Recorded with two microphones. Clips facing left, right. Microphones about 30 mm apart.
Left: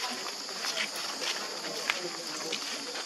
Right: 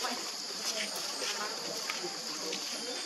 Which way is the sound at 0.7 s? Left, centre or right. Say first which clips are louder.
Left 3 dB; left.